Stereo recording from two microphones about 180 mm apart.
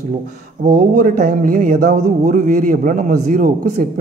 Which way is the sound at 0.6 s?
50° right (ahead or behind).